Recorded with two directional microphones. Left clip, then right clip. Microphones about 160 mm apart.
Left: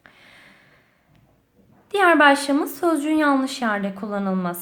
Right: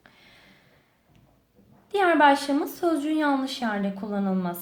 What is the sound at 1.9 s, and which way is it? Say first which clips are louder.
A woman's voice: left 4 dB; 20° left (ahead or behind).